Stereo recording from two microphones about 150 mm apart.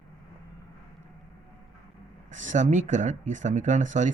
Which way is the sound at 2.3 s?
55° right (ahead or behind).